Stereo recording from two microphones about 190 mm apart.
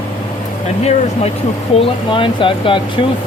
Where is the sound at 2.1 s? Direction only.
25° left (ahead or behind).